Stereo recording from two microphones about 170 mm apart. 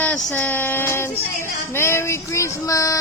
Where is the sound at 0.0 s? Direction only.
10° left (ahead or behind).